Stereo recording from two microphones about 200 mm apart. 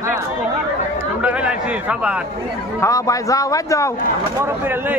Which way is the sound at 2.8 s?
15° left (ahead or behind).